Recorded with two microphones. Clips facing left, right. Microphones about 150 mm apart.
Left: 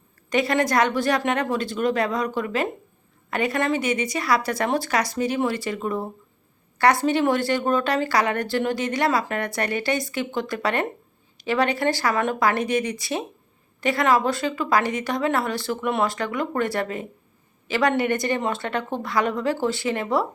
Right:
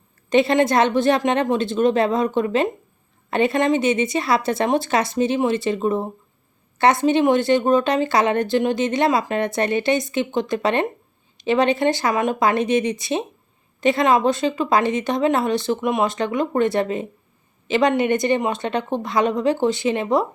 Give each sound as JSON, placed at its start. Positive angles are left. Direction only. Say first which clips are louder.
{"t": 0.3, "sound": "a woman's voice", "louder": "right 5 dB", "side_deg": -25}